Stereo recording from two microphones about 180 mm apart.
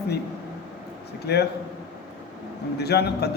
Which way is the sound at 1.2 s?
65° left (ahead or behind).